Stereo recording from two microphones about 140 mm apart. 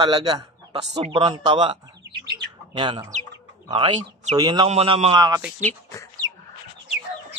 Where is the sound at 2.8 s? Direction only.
35° right (ahead or behind).